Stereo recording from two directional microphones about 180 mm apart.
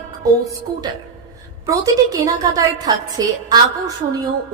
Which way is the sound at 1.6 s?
20° right (ahead or behind).